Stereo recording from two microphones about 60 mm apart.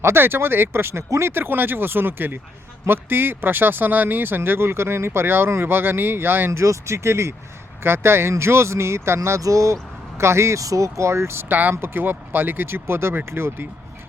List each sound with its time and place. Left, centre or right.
0.0 s speech: right
6.6 s speech: right
9.4 s speech: right
10.2 s speech: right